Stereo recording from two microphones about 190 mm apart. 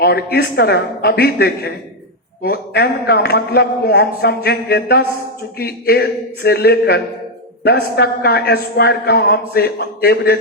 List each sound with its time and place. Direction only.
0.0 s a woman's voice: 55° left (ahead or behind)